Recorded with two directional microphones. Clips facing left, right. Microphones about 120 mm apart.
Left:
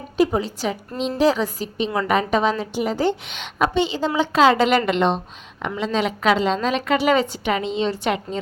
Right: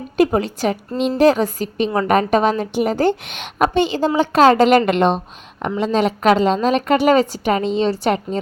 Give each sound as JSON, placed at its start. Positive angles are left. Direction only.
{"t": 0.2, "sound": "a woman's voice", "side_deg": -60}